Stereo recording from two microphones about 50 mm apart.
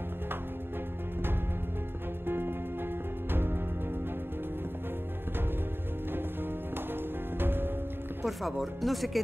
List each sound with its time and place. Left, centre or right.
2.2 s music: right
6.9 s music: right
8.3 s speech: centre